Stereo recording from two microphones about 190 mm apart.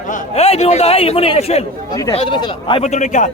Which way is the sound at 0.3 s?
35° left (ahead or behind).